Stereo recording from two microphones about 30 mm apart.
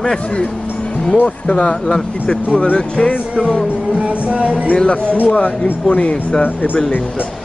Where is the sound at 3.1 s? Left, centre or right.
Left.